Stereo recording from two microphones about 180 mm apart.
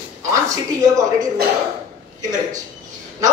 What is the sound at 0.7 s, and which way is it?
Speech, 20° right (ahead or behind).